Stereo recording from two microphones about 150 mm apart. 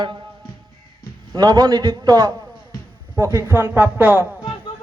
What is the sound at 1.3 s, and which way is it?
A man's voice, 30° right (ahead or behind).